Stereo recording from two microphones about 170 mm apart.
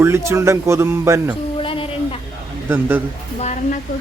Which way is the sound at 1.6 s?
30° left (ahead or behind).